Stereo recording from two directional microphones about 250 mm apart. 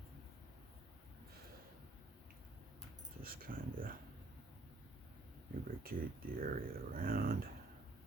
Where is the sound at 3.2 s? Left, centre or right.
Right.